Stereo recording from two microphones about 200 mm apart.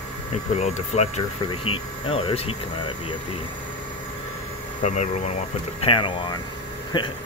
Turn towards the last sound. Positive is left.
turn(degrees=25)  # may be behind; listen again after turning